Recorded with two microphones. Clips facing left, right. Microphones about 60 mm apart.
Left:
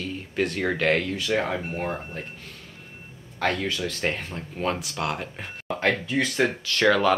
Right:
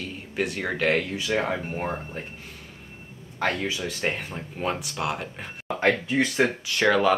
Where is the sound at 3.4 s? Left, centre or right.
Centre.